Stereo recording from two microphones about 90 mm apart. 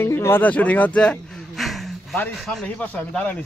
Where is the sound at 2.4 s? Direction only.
5° left (ahead or behind).